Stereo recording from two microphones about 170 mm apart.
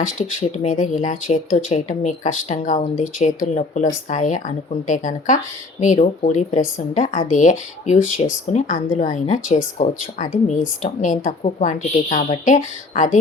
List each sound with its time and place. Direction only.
0.2 s speech: 45° left (ahead or behind)